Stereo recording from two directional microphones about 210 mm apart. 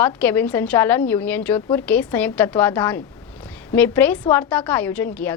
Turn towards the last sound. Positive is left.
turn(degrees=10)  # may be behind; listen again after turning